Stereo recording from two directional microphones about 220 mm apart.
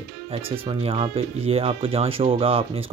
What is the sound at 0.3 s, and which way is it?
Speech, 25° right (ahead or behind).